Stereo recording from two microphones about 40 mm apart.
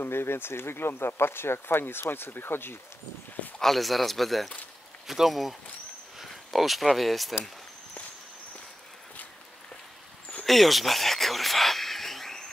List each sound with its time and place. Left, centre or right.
0.0 s speech: left
3.6 s speech: centre
10.4 s a sound: centre